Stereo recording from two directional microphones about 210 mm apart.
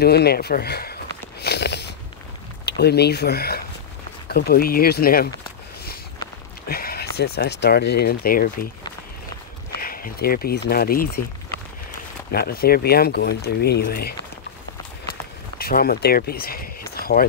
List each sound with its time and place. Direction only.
0.0 s speech: 50° left (ahead or behind)
1.4 s a sound: 50° left (ahead or behind)
2.6 s speech: 50° left (ahead or behind)
6.7 s speech: 45° left (ahead or behind)
9.8 s speech: 45° left (ahead or behind)
12.3 s speech: 45° left (ahead or behind)
15.5 s speech: 45° left (ahead or behind)